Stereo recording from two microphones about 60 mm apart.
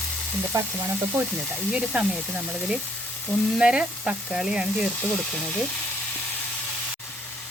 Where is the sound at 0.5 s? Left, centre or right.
Right.